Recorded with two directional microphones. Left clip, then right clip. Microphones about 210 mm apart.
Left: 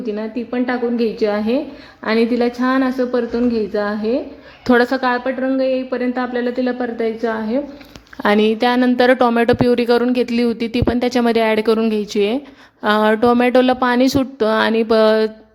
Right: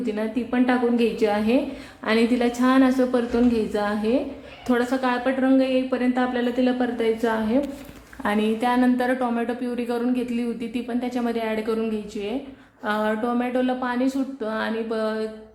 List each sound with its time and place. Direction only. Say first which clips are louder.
0.2 s a woman's voice: left 2 dB; 30° left (ahead or behind)
8.2 s a woman's voice: left 9 dB; 45° left (ahead or behind)